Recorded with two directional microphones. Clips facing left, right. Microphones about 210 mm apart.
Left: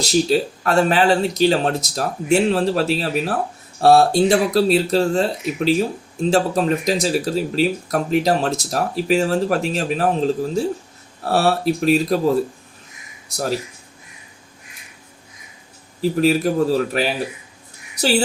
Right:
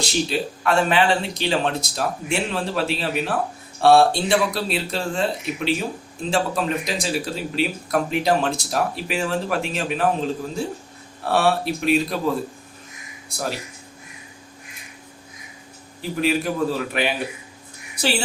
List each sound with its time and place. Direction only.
0.0 s speech: 40° left (ahead or behind)
13.3 s speech: 40° left (ahead or behind)
16.0 s speech: 40° left (ahead or behind)